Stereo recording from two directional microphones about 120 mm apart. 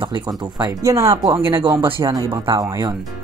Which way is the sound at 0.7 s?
25° right (ahead or behind).